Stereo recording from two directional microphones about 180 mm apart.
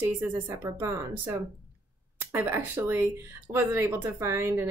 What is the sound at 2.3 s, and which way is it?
A woman's voice, 10° right (ahead or behind).